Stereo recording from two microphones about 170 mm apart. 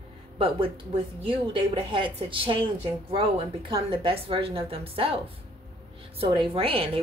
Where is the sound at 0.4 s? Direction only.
30° right (ahead or behind).